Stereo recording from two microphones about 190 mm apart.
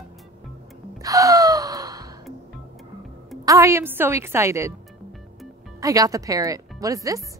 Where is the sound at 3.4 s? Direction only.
15° right (ahead or behind).